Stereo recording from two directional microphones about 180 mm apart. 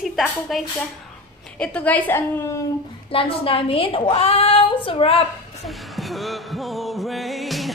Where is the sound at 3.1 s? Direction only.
30° left (ahead or behind).